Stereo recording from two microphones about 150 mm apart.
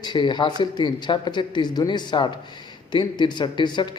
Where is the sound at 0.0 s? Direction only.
30° left (ahead or behind).